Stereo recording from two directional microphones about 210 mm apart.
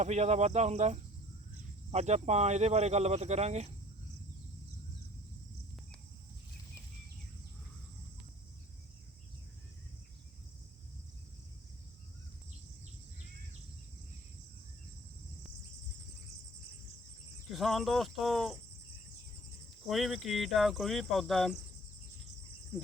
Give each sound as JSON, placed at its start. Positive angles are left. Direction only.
{"t": 0.0, "sound": "speech", "side_deg": -35}
{"t": 17.5, "sound": "speech", "side_deg": 0}
{"t": 19.9, "sound": "speech", "side_deg": 0}